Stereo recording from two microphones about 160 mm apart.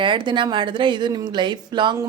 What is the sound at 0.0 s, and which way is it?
A woman's voice, 30° right (ahead or behind).